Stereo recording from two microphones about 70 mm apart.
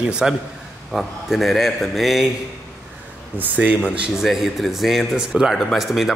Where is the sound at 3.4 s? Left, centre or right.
Right.